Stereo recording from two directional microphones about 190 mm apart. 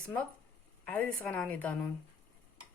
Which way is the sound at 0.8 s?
5° left (ahead or behind).